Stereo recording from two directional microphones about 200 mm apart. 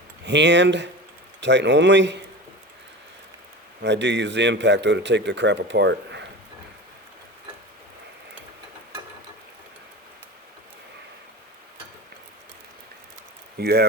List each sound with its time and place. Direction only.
0.3 s a man's voice: 60° right (ahead or behind)
3.8 s a man's voice: 60° right (ahead or behind)
13.6 s speech: 55° right (ahead or behind)